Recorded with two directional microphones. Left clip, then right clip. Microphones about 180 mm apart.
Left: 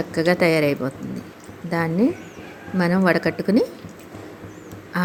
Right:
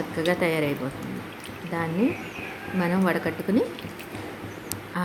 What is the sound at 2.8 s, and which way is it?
Speech, 30° left (ahead or behind).